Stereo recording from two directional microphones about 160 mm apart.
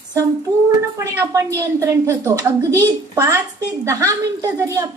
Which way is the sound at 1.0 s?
20° right (ahead or behind).